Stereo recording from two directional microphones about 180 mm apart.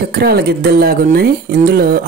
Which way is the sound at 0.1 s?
60° right (ahead or behind).